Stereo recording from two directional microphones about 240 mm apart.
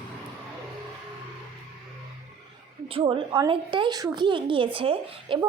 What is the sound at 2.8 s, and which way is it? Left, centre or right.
A woman's voice, right.